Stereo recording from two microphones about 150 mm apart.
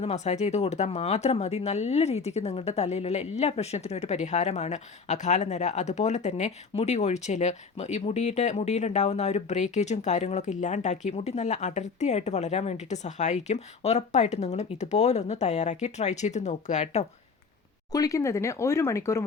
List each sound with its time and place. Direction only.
0.0 s speech: 45° left (ahead or behind)
17.9 s speech: 20° left (ahead or behind)